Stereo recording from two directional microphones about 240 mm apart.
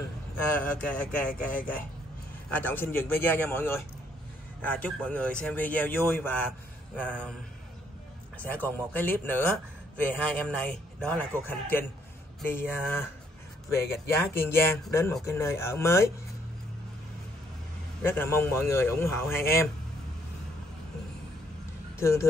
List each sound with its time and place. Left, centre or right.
0.6 s a man's voice: centre
1.4 s speech: left
2.5 s a man's voice: centre
8.6 s a man's voice: centre
12.4 s speech: centre
18.0 s speech: centre
21.9 s speech: centre